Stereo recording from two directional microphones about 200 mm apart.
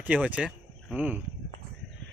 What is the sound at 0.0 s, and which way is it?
Speech, 5° right (ahead or behind).